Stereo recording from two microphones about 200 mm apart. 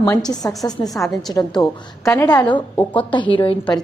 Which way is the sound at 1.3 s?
20° left (ahead or behind).